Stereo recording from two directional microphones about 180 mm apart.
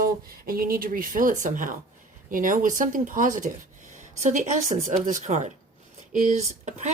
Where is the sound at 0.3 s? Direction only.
55° right (ahead or behind).